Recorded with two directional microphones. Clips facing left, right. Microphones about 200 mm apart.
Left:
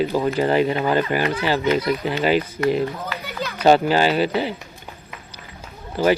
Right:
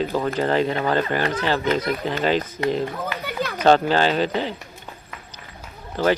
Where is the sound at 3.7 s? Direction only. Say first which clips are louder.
Left 2 dB; 10° left (ahead or behind).